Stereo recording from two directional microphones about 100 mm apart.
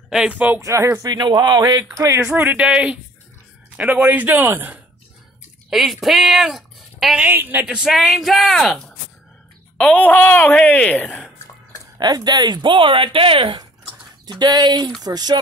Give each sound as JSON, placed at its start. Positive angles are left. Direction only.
{"t": 0.1, "sound": "speech", "side_deg": -5}
{"t": 0.6, "sound": "speech", "side_deg": -30}
{"t": 2.0, "sound": "speech", "side_deg": -30}
{"t": 2.2, "sound": "a man's voice", "side_deg": -15}
{"t": 5.7, "sound": "speech", "side_deg": 0}
{"t": 7.2, "sound": "speech", "side_deg": -20}
{"t": 9.8, "sound": "speech", "side_deg": 15}
{"t": 11.1, "sound": "drip", "side_deg": 0}
{"t": 12.0, "sound": "speech", "side_deg": -45}
{"t": 14.2, "sound": "speech", "side_deg": -45}